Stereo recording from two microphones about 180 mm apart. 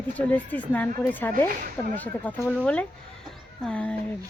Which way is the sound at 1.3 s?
50° right (ahead or behind).